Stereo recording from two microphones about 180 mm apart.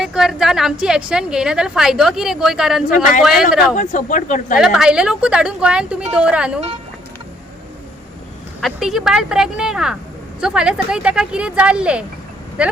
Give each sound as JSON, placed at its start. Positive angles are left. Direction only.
{"t": 0.0, "sound": "a woman's voice", "side_deg": 0}
{"t": 3.0, "sound": "speech", "side_deg": 50}
{"t": 4.5, "sound": "a woman's voice", "side_deg": -5}
{"t": 8.6, "sound": "a woman's voice", "side_deg": 0}